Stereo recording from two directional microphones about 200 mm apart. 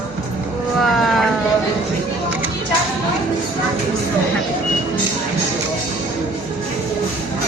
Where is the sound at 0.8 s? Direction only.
Centre (ahead or behind).